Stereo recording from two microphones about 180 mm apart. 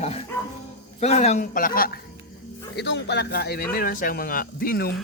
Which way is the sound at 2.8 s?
70° left (ahead or behind).